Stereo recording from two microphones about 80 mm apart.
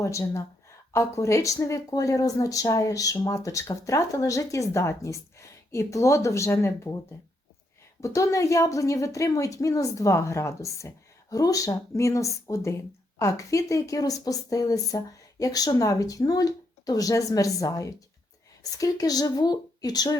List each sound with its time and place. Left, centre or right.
0.0 s speech: left
8.0 s speech: left